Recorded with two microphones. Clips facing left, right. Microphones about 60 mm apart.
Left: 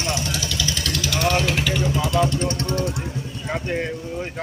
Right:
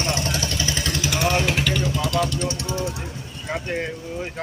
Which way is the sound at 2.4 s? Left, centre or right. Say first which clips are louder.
Left 2 dB; left.